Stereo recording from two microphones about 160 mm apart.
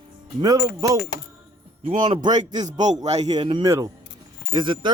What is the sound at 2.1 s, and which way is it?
Speech, 30° right (ahead or behind).